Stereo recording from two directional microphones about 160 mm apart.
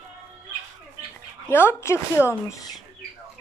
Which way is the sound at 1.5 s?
15° left (ahead or behind).